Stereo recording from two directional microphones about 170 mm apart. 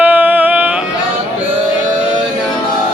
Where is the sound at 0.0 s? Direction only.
10° right (ahead or behind).